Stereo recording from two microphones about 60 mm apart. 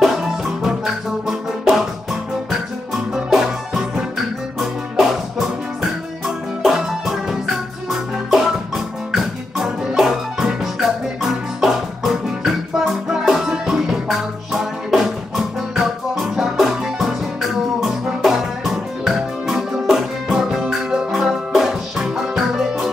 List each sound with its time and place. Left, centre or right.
1.2 s music: centre
3.3 s music: centre